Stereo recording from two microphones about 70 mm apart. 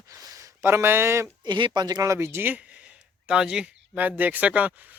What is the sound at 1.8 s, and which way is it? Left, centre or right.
Speech, right.